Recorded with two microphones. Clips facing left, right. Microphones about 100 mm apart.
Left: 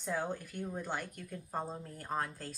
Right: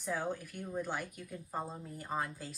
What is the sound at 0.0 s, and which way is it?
Speech, 5° right (ahead or behind).